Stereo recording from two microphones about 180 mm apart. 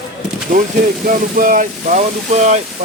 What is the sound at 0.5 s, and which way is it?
Speech, 45° right (ahead or behind).